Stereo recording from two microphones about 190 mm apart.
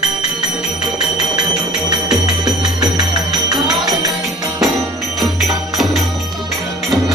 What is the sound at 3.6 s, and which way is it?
Music, centre (ahead or behind).